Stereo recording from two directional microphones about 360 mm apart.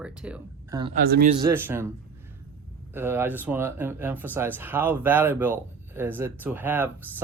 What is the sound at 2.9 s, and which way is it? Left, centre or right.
Speech, centre.